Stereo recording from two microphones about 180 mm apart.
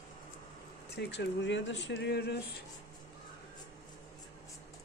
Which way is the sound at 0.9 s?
70° left (ahead or behind).